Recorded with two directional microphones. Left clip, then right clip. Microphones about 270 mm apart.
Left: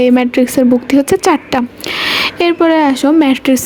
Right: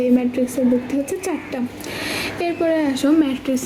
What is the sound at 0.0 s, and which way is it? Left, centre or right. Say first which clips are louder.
A woman's voice: left 8 dB; left.